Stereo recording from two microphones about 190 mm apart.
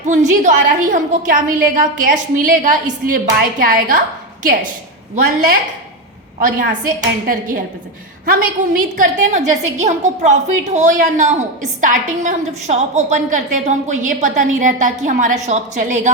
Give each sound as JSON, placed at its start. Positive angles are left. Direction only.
{"t": 0.0, "sound": "a woman's voice", "side_deg": -40}
{"t": 6.4, "sound": "a woman's voice", "side_deg": -45}